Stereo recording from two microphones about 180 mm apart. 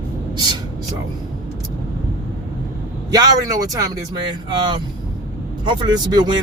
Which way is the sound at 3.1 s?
20° right (ahead or behind).